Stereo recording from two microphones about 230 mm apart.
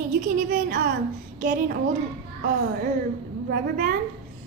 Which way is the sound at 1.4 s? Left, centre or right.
Right.